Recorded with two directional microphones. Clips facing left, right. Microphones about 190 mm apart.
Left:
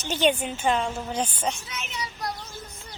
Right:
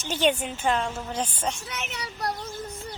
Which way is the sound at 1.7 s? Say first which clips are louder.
Even; 65° right (ahead or behind).